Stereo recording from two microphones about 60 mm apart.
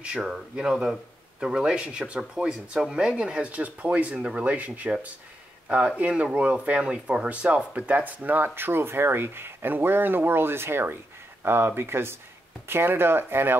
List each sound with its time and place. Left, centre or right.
0.0 s speech: centre; by 13.6 s right